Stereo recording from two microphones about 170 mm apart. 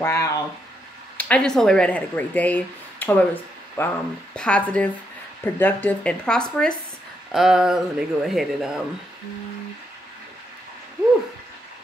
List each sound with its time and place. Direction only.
0.0 s speech: 15° left (ahead or behind)
1.1 s speech: 5° left (ahead or behind)